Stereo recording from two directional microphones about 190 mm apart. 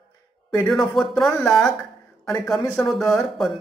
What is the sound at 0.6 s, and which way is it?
Speech, centre (ahead or behind).